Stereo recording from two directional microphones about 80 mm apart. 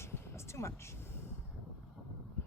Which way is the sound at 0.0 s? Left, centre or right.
Left.